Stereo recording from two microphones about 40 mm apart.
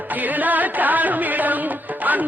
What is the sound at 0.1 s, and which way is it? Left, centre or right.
Music, right.